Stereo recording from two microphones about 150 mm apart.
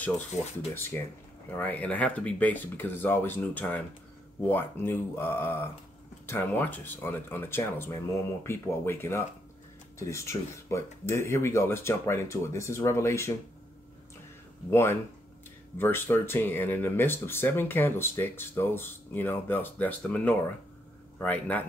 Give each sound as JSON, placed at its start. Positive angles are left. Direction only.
{"t": 0.7, "sound": "speech", "side_deg": 15}
{"t": 14.7, "sound": "speech", "side_deg": 15}